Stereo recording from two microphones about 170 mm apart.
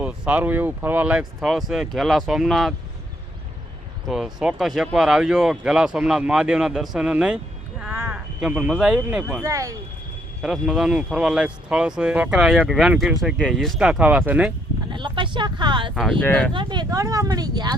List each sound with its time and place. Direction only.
0.0 s speech: 10° right (ahead or behind)
4.0 s speech: 5° right (ahead or behind)
7.8 s sheep: 15° right (ahead or behind)
9.3 s speech: 15° right (ahead or behind)
10.4 s speech: 5° right (ahead or behind)
14.9 s speech: 30° right (ahead or behind)
16.2 s speech: 10° left (ahead or behind)
16.5 s speech: 30° right (ahead or behind)